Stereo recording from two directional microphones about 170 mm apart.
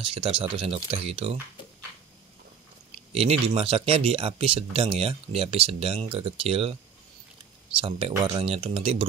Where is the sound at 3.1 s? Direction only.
35° right (ahead or behind).